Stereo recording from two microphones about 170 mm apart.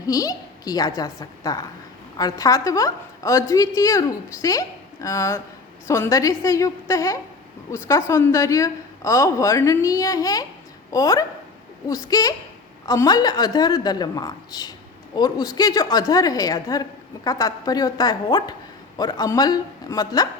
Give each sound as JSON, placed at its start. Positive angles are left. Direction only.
{"t": 0.0, "sound": "a woman's voice", "side_deg": 20}